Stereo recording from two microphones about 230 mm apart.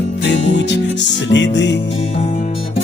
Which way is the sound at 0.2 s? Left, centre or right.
Left.